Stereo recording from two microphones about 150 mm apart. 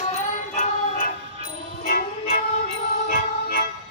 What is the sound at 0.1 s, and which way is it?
Music, 60° left (ahead or behind).